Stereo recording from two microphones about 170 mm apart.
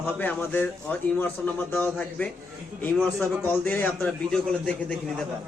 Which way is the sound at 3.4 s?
10° left (ahead or behind).